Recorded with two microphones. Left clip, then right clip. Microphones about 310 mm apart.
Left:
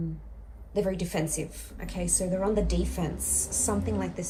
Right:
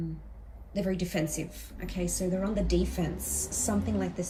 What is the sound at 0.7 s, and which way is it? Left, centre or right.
A woman's voice, centre.